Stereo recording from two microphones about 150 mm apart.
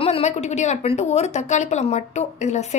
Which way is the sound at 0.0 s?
45° left (ahead or behind).